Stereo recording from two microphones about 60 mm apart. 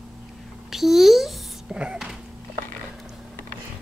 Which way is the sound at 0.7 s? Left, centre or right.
Centre.